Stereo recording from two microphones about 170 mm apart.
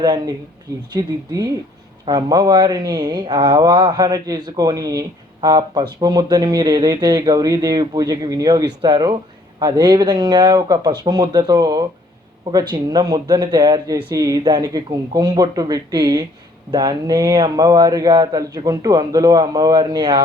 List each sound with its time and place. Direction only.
0.0 s speech: 25° right (ahead or behind)